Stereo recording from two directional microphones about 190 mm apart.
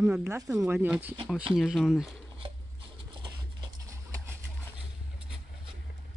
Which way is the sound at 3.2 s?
20° right (ahead or behind).